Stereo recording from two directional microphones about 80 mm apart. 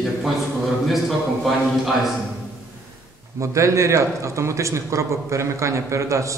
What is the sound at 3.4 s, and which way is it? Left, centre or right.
A man's voice, right.